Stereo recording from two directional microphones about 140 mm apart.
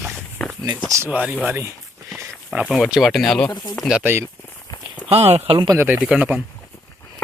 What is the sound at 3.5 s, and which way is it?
Speech, 30° left (ahead or behind).